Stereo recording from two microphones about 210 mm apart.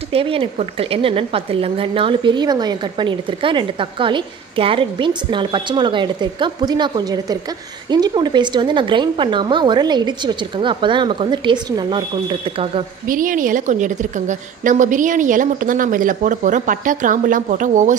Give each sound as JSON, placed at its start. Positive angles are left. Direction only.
{"t": 0.1, "sound": "a woman's voice", "side_deg": -25}
{"t": 13.0, "sound": "a woman's voice", "side_deg": -40}